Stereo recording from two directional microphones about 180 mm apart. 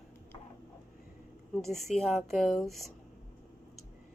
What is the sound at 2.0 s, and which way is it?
Speech, centre (ahead or behind).